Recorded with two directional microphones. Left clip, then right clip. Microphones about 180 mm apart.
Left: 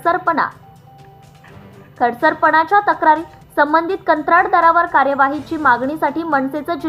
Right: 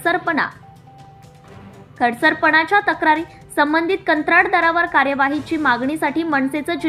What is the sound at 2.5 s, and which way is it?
A woman's voice, 10° right (ahead or behind).